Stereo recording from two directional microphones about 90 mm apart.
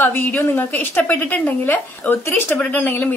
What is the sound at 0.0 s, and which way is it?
A woman's voice, 20° left (ahead or behind).